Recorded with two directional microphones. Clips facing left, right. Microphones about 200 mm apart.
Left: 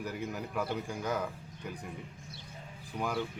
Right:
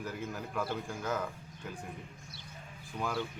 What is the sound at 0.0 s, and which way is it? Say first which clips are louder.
Speech: left 2 dB; 15° left (ahead or behind).